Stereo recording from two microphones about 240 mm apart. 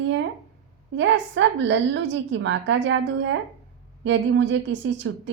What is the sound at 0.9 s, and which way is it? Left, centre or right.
A woman's voice, right.